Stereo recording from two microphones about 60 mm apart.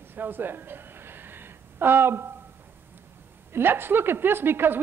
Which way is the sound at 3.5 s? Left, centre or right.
Right.